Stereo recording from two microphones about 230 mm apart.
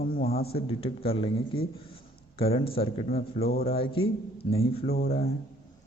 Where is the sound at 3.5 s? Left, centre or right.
Left.